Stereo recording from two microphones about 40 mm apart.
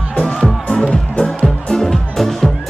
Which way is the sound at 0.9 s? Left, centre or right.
Left.